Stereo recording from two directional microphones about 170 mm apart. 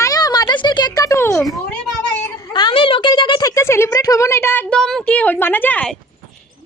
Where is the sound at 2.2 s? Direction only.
25° left (ahead or behind).